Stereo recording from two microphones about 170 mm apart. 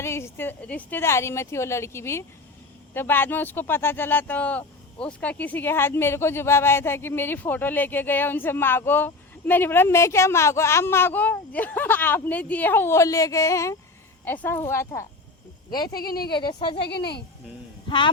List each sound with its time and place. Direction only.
0.0 s speech: 15° left (ahead or behind)
16.0 s speech: 65° left (ahead or behind)
16.3 s speech: 25° left (ahead or behind)
16.9 s speech: 75° left (ahead or behind)
17.8 s speech: 30° left (ahead or behind)